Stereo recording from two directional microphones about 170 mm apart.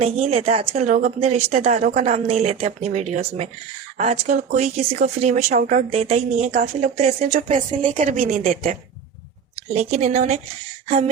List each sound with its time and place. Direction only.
0.0 s speech: 35° right (ahead or behind)
0.9 s a woman's voice: 50° right (ahead or behind)
9.7 s speech: 40° right (ahead or behind)
10.8 s a sound: 40° right (ahead or behind)